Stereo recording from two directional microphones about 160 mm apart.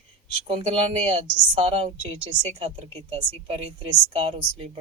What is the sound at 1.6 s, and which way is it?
Speech, 35° right (ahead or behind).